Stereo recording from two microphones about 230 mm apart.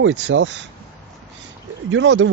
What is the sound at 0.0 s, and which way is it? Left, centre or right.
Speech, right.